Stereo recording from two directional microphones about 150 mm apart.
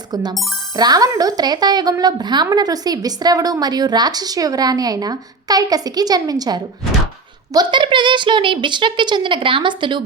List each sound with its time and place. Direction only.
0.1 s a child's voice: 30° right (ahead or behind)